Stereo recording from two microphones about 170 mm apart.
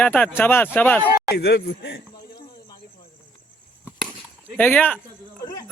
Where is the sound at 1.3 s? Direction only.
75° left (ahead or behind).